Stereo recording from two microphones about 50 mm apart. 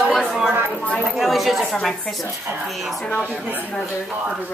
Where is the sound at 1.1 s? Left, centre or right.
Centre.